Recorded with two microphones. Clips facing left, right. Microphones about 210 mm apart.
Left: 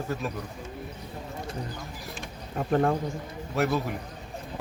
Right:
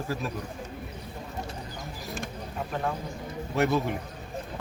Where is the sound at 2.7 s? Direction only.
50° left (ahead or behind).